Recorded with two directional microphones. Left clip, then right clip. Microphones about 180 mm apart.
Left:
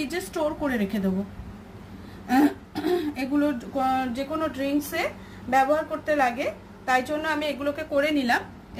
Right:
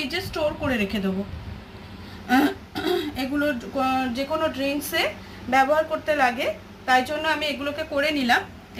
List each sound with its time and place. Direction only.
0.1 s a woman's voice: 35° left (ahead or behind)
2.2 s throat clearing: 5° left (ahead or behind)
3.7 s a woman's voice: 5° left (ahead or behind); by 8.4 s 30° left (ahead or behind)